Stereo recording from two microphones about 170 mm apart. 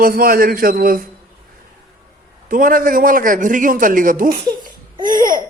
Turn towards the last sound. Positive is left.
turn(degrees=-55)  # may be behind; listen again after turning